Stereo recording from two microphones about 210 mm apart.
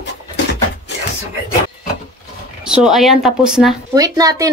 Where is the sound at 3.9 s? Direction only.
15° right (ahead or behind).